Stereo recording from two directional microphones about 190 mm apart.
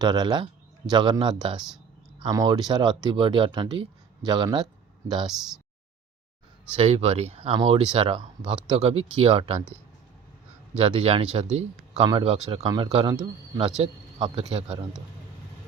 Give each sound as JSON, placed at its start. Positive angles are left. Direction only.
{"t": 0.0, "sound": "speech", "side_deg": -20}
{"t": 5.3, "sound": "speech", "side_deg": 0}
{"t": 6.7, "sound": "speech", "side_deg": -30}
{"t": 10.8, "sound": "speech", "side_deg": -30}